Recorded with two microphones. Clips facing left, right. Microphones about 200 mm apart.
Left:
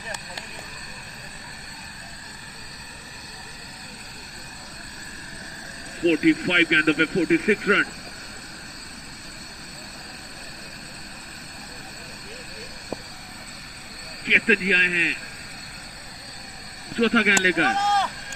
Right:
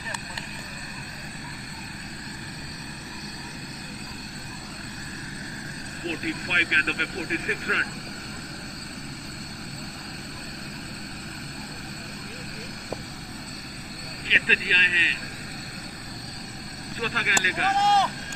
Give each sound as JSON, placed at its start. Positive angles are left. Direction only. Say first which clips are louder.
{"t": 6.1, "sound": "speech", "louder": "left 13 dB", "side_deg": 80}
{"t": 14.3, "sound": "speech", "louder": "left 8 dB", "side_deg": 55}
{"t": 17.0, "sound": "speech", "louder": "left 11 dB", "side_deg": 75}
{"t": 17.7, "sound": "a sound", "louder": "right 1 dB", "side_deg": -10}